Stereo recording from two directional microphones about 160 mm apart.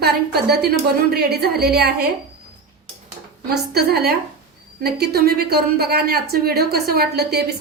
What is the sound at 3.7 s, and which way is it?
A woman's voice, 80° right.